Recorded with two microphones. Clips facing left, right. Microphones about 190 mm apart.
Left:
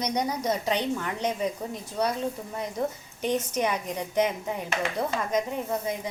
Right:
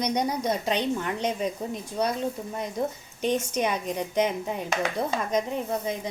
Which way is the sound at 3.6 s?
20° right (ahead or behind).